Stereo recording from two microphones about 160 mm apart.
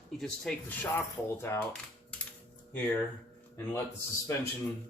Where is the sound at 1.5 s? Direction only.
15° left (ahead or behind).